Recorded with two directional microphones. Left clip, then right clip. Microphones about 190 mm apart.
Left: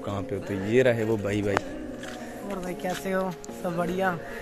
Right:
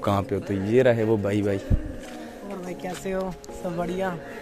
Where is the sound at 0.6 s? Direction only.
25° right (ahead or behind).